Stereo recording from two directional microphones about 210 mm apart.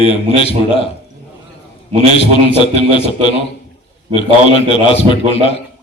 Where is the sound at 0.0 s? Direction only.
25° left (ahead or behind).